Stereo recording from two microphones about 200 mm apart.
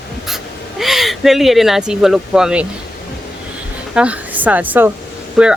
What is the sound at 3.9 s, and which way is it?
A woman's voice, 5° right (ahead or behind).